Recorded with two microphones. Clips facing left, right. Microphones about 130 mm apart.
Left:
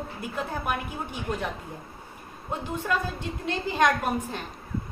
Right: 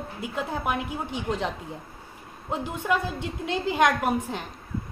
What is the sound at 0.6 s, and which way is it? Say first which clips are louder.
Speech: right 2 dB; 20° right (ahead or behind).